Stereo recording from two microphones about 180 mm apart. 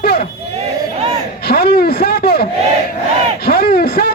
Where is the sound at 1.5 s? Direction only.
60° left (ahead or behind).